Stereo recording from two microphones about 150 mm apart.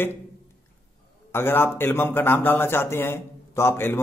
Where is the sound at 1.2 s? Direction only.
15° left (ahead or behind).